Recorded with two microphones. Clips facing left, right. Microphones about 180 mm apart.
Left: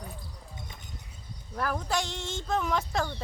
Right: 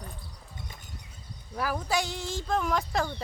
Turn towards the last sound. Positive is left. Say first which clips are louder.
# right 1 dB
turn(degrees=0)  # may be behind; listen again after turning